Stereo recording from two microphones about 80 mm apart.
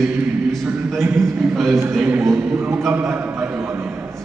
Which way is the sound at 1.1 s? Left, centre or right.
Centre.